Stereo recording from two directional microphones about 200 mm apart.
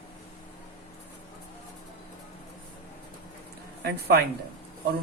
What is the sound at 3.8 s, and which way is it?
Speech, 55° right (ahead or behind).